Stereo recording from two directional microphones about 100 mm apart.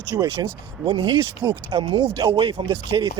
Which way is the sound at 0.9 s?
50° right (ahead or behind).